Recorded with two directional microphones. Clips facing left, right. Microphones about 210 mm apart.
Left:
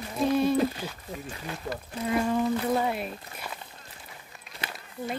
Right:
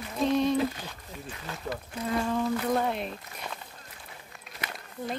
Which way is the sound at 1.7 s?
10° left (ahead or behind).